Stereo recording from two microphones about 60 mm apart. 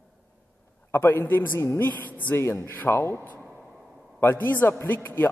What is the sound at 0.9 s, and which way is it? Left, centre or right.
Speech, left.